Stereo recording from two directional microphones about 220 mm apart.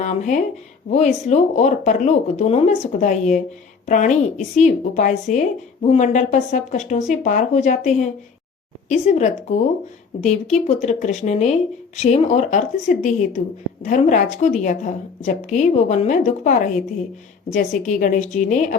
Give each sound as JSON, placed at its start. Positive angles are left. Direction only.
{"t": 0.0, "sound": "a woman's voice", "side_deg": 35}